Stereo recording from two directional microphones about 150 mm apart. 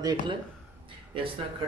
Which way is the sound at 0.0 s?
25° right (ahead or behind).